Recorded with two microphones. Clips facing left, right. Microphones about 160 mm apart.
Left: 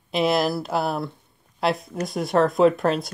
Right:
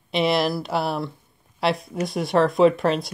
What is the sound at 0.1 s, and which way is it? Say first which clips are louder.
Speech: even; centre (ahead or behind).